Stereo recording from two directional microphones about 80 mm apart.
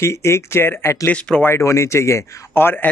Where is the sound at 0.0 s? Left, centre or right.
Left.